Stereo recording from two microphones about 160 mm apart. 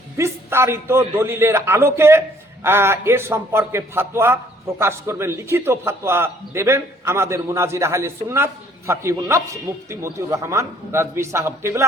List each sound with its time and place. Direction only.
0.2 s a man's voice: 15° right (ahead or behind)